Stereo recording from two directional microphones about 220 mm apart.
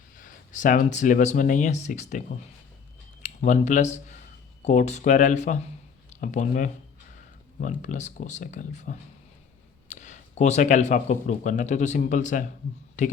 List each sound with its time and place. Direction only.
0.2 s speech: 35° left (ahead or behind)
3.2 s speech: 35° left (ahead or behind)